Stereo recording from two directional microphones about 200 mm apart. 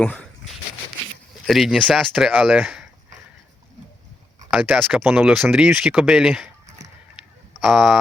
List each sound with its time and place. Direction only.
0.0 s speech: 5° left (ahead or behind)
1.5 s speech: centre (ahead or behind)
4.5 s speech: 5° right (ahead or behind)
6.7 s a sound: 35° right (ahead or behind)
7.6 s speech: centre (ahead or behind)